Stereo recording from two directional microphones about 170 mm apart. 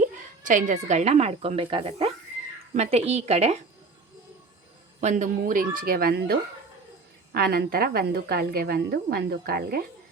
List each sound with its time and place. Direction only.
0.0 s a woman's voice: 50° right (ahead or behind)
4.9 s a woman's voice: 45° right (ahead or behind); by 6.3 s 65° right (ahead or behind)
7.3 s a woman's voice: 65° right (ahead or behind)